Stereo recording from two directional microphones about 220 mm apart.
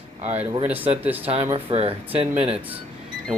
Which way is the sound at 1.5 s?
25° right (ahead or behind).